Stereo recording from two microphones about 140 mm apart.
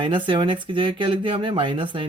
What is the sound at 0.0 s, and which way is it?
Speech, 35° right (ahead or behind).